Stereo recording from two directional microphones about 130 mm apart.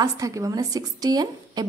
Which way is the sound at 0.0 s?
25° right (ahead or behind).